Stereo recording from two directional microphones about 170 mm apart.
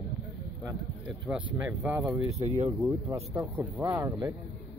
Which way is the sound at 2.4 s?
40° right (ahead or behind).